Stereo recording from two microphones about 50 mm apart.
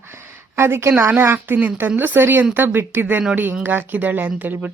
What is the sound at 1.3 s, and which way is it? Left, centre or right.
Speech, right.